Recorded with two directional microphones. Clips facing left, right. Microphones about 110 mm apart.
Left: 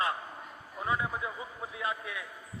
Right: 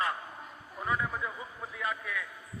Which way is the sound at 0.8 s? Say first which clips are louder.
Even; 15° left (ahead or behind).